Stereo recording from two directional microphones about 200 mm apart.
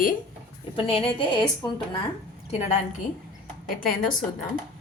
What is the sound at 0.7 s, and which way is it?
A woman's voice, 30° left (ahead or behind).